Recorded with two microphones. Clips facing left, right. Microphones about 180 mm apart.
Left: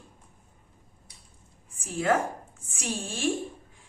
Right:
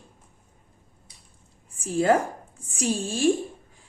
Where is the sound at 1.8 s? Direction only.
35° right (ahead or behind).